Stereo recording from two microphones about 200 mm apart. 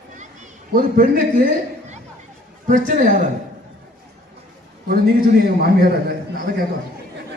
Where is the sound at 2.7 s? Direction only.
40° right (ahead or behind).